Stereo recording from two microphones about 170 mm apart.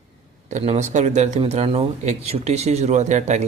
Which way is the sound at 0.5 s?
40° right (ahead or behind).